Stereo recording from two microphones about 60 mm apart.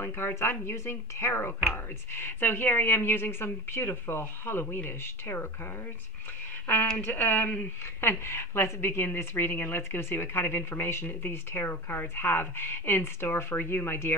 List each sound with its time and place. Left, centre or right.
0.0 s a woman's voice: left
7.0 s a woman's voice: left
8.0 s a woman's voice: left